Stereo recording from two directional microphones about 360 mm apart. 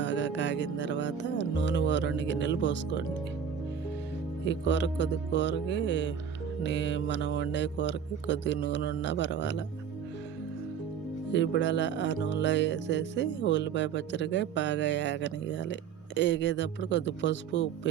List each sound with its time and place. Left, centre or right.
0.0 s music: left
4.4 s music: left
11.3 s music: left